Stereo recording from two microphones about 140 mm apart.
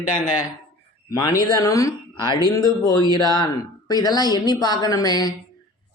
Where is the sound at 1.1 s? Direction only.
25° left (ahead or behind).